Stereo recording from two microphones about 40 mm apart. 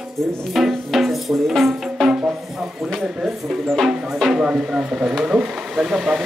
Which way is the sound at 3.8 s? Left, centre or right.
Centre.